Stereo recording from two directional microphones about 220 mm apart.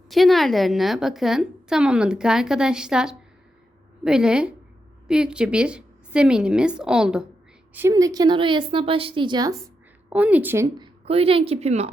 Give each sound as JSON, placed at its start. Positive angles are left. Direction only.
{"t": 0.1, "sound": "a woman's voice", "side_deg": 0}
{"t": 10.1, "sound": "a woman's voice", "side_deg": -5}